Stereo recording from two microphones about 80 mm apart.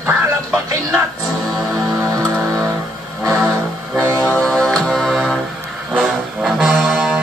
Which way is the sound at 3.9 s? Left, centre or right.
Right.